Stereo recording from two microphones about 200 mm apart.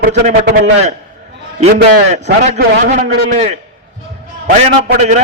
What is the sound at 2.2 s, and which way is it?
A man's voice, 35° right (ahead or behind).